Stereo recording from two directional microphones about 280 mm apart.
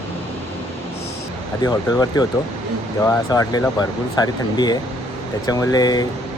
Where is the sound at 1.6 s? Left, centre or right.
Centre.